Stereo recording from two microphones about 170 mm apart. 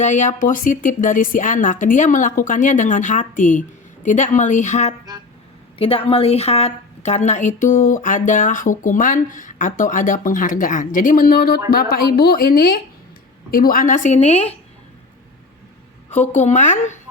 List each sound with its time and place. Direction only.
0.0 s a woman's voice: 45° left (ahead or behind)
16.3 s a woman's voice: 45° left (ahead or behind)